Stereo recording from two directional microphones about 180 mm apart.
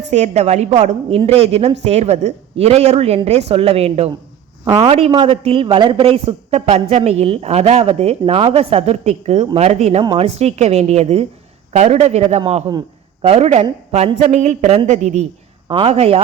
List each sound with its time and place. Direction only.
0.1 s a man's voice: 40° right (ahead or behind)